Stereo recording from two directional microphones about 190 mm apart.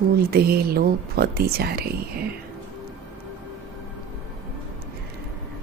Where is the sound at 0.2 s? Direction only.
55° right (ahead or behind).